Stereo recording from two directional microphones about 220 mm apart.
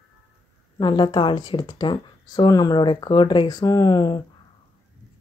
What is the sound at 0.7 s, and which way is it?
Speech, 20° left (ahead or behind).